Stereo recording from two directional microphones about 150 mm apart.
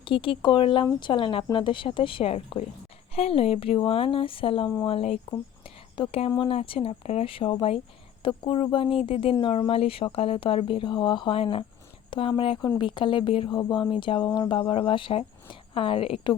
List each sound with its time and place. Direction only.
0.0 s speech: 35° left (ahead or behind)